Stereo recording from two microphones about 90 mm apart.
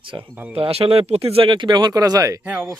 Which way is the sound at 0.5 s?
90° right.